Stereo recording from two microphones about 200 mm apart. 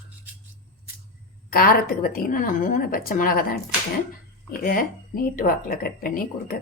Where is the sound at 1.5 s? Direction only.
45° left (ahead or behind).